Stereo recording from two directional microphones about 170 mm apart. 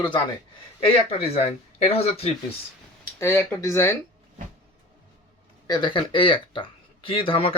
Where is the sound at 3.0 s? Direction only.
15° left (ahead or behind).